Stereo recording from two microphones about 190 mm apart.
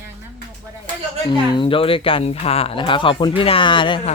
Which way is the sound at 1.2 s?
25° left (ahead or behind).